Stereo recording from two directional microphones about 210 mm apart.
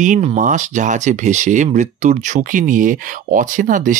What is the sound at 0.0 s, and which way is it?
Speech, 35° right (ahead or behind).